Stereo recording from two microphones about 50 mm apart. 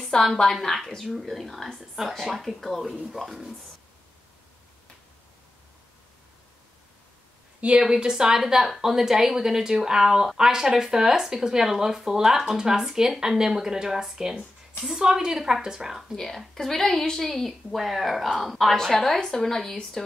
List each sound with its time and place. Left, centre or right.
0.0 s speech: centre
7.8 s a woman's voice: centre
16.2 s speech: centre